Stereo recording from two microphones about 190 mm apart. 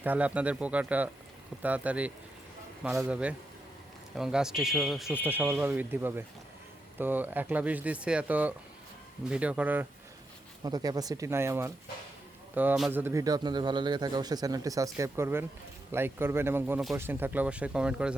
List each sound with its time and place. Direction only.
0.0 s speech: 10° right (ahead or behind)
10.6 s a man's voice: 20° right (ahead or behind); by 18.1 s 5° right (ahead or behind)